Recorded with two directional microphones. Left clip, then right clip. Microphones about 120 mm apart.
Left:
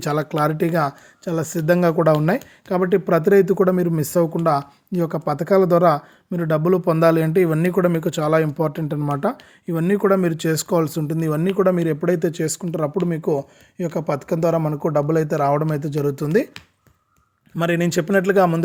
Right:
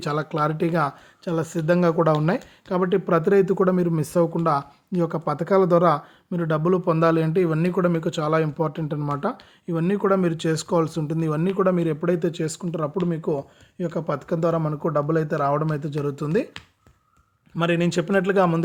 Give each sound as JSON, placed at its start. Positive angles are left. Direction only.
{"t": 0.0, "sound": "speech", "side_deg": 55}
{"t": 17.6, "sound": "speech", "side_deg": 50}